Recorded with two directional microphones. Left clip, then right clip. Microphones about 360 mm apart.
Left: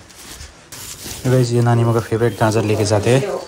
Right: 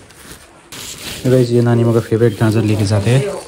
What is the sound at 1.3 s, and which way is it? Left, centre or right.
Speech, right.